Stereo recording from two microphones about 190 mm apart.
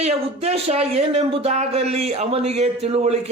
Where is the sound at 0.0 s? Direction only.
35° right (ahead or behind).